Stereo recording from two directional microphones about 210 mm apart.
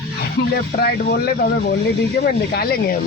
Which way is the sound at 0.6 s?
45° left (ahead or behind).